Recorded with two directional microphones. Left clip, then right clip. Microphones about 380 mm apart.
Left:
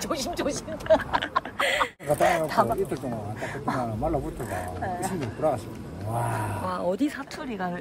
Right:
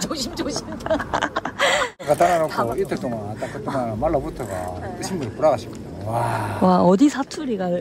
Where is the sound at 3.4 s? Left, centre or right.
Left.